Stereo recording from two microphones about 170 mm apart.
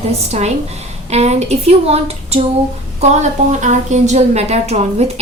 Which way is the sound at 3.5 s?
45° right (ahead or behind).